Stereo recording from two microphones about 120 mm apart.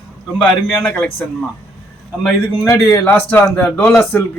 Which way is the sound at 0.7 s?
15° left (ahead or behind).